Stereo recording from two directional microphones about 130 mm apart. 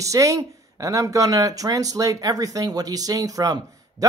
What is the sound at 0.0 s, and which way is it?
Speech, 25° right (ahead or behind).